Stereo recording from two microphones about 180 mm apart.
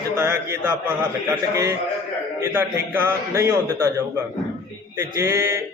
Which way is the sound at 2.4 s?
10° right (ahead or behind).